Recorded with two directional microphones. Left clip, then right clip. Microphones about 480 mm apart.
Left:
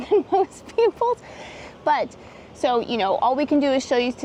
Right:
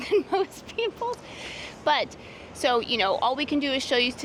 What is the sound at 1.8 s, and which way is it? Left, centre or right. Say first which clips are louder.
A woman's voice: left 3 dB; centre.